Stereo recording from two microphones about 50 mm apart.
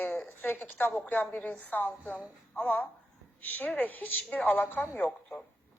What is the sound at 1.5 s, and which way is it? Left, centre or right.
A woman's voice, left.